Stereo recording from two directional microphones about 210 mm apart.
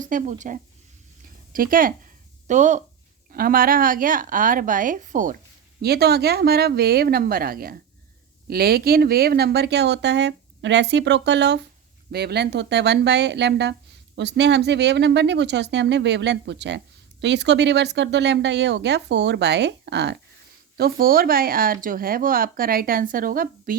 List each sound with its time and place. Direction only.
0.0 s speech: 40° right (ahead or behind)
5.8 s speech: 50° right (ahead or behind)